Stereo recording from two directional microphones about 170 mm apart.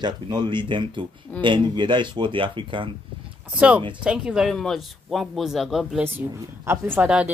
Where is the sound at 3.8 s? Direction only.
30° right (ahead or behind).